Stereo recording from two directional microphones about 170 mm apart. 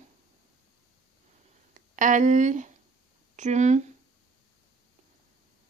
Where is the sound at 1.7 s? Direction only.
50° right (ahead or behind).